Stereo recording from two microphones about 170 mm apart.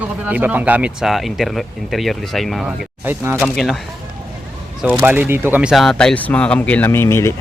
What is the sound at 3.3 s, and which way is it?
Speech, centre (ahead or behind).